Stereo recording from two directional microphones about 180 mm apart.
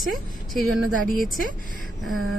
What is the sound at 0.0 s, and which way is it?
Speech, centre (ahead or behind).